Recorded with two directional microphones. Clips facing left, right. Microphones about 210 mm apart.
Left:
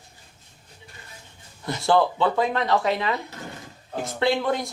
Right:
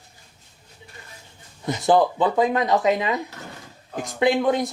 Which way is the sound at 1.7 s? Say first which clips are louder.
Right 2 dB; 20° right (ahead or behind).